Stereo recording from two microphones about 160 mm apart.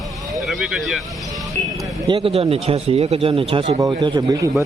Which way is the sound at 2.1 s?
35° right (ahead or behind).